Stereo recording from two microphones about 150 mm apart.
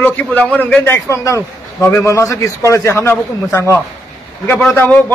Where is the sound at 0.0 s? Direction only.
10° left (ahead or behind).